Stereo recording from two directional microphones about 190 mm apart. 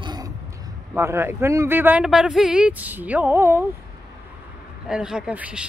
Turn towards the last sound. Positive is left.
turn(degrees=-5)  # may be behind; listen again after turning